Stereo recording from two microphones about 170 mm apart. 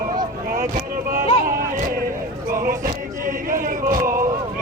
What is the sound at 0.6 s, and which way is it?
Vehicle, 50° right (ahead or behind).